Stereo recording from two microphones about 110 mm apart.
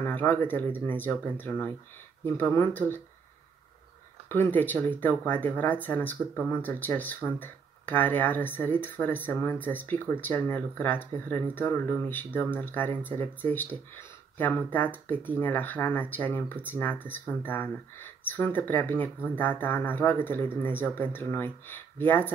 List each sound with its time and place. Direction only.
0.0 s speech: 15° left (ahead or behind)
4.3 s speech: 20° left (ahead or behind)